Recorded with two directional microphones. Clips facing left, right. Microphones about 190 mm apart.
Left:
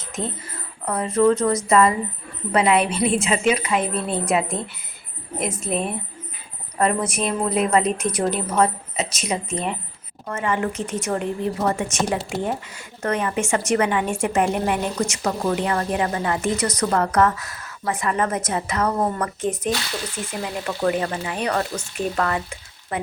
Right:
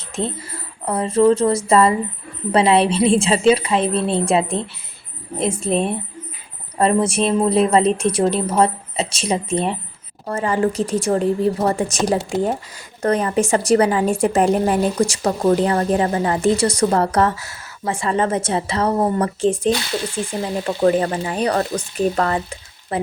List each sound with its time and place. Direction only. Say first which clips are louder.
0.9 s a woman's voice: right 3 dB; 25° right (ahead or behind)